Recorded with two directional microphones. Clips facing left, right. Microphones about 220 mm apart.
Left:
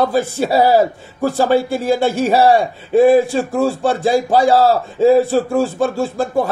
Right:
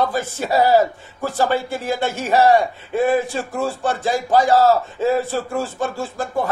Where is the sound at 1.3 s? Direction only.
40° left (ahead or behind).